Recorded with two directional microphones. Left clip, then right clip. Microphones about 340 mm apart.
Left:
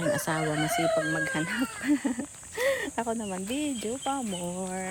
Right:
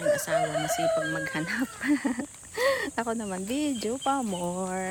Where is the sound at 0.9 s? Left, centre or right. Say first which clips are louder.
Left 1 dB; centre.